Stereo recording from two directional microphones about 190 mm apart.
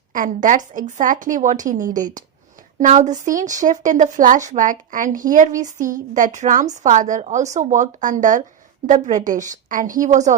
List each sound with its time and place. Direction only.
0.1 s a woman's voice: 45° right (ahead or behind)